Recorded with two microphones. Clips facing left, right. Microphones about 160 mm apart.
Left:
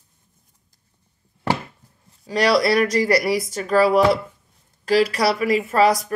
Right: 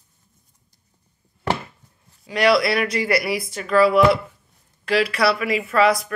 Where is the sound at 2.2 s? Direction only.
35° left (ahead or behind).